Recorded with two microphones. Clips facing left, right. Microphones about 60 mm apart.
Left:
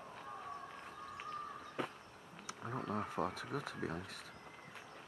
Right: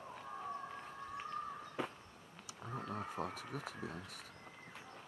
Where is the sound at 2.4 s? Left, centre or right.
Left.